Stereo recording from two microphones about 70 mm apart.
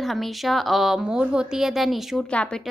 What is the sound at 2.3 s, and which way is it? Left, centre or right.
Speech, centre.